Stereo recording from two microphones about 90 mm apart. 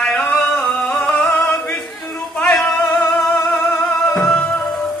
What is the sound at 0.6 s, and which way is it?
Music, 10° left (ahead or behind).